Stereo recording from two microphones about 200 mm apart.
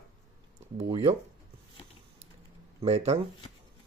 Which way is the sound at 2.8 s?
35° right (ahead or behind).